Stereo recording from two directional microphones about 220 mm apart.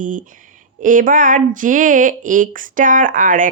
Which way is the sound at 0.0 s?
35° right (ahead or behind).